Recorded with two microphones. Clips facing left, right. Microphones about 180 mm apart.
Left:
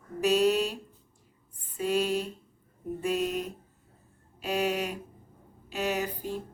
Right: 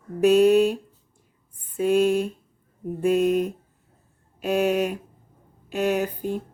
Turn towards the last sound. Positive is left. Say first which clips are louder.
# right 7 dB
turn(degrees=-55)  # may be behind; listen again after turning